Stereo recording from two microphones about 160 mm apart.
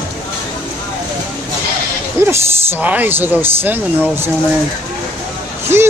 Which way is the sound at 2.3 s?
10° right (ahead or behind).